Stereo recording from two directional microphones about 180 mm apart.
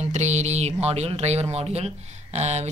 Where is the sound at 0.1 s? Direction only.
40° right (ahead or behind).